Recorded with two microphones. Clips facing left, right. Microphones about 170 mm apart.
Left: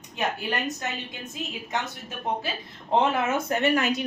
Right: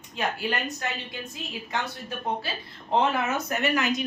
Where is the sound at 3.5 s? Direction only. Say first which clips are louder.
Left 3 dB; 25° left (ahead or behind).